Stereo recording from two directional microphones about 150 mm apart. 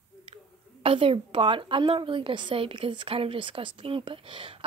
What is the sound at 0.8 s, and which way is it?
A woman's voice, 40° right (ahead or behind).